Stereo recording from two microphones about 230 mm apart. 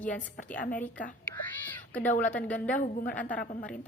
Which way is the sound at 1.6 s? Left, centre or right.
Centre.